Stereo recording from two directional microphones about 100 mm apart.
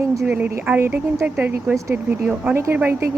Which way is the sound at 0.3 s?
15° right (ahead or behind).